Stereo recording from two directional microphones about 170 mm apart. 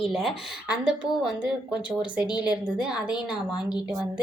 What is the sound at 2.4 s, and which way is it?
Speech, 5° right (ahead or behind).